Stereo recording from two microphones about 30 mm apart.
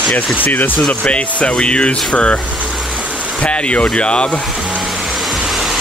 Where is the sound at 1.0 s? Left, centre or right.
Left.